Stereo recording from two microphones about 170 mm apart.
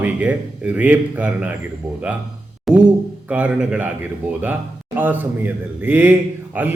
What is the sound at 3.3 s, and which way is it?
A man's voice, 5° right (ahead or behind).